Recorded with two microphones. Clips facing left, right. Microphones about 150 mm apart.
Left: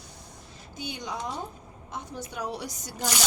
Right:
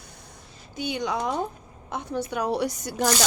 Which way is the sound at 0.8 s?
70° right (ahead or behind).